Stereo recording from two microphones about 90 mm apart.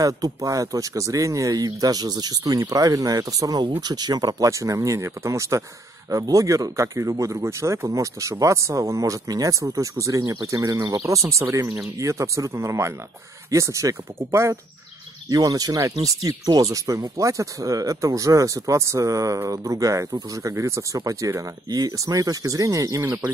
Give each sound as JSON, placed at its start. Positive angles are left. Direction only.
{"t": 0.0, "sound": "speech", "side_deg": -40}
{"t": 15.2, "sound": "speech", "side_deg": -45}